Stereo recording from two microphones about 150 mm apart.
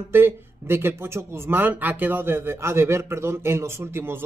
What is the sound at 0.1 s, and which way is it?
A man's voice, 15° right (ahead or behind).